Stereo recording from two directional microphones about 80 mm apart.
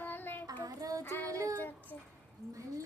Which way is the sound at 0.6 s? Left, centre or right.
Right.